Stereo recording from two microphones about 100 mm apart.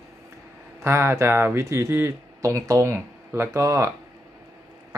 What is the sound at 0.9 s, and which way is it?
Speech, 25° right (ahead or behind).